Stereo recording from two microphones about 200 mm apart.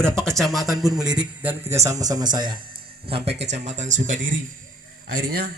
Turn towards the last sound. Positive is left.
turn(degrees=-50)  # may be behind; listen again after turning